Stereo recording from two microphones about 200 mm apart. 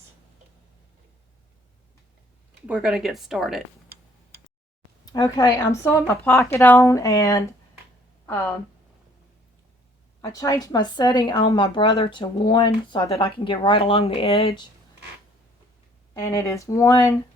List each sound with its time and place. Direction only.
2.6 s speech: 5° right (ahead or behind)
5.0 s a woman's voice: 20° left (ahead or behind)
10.2 s a woman's voice: 15° left (ahead or behind)
16.1 s a woman's voice: 15° left (ahead or behind)